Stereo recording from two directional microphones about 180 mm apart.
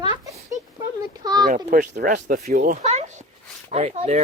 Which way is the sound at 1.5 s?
50° right (ahead or behind).